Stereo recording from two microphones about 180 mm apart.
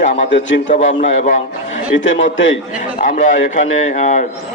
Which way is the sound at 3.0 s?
45° left (ahead or behind).